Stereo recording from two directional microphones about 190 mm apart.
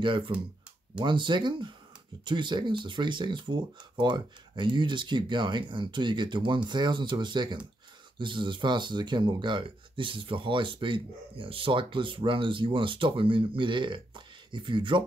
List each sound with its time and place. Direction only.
0.3 s speech: 25° right (ahead or behind)